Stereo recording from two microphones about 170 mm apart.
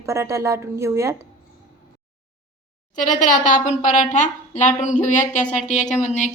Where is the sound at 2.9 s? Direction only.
50° left (ahead or behind).